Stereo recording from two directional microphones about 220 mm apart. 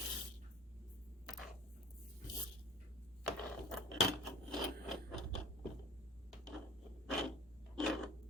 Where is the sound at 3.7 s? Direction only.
Centre (ahead or behind).